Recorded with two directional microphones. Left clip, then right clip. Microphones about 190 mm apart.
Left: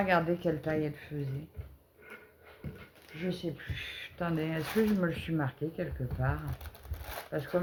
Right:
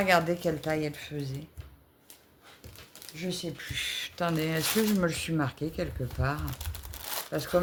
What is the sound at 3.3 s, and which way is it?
Speech, 55° right (ahead or behind).